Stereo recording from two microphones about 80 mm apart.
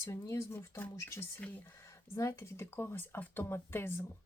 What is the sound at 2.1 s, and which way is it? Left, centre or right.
Speech, left.